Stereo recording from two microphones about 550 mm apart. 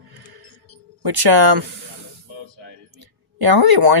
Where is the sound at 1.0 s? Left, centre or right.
Right.